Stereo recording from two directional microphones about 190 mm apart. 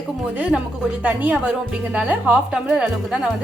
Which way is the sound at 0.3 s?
5° right (ahead or behind).